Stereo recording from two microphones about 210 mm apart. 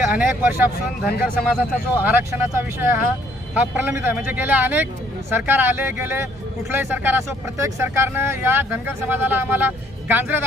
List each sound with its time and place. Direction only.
0.1 s speech: 10° right (ahead or behind)